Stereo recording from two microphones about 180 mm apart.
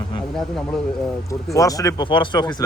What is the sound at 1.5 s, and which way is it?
Speech, 20° left (ahead or behind).